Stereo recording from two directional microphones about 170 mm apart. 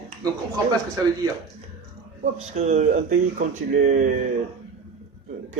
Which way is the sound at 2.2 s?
40° right (ahead or behind).